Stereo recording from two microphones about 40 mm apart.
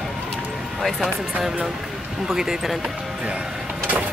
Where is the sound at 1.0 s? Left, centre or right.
Centre.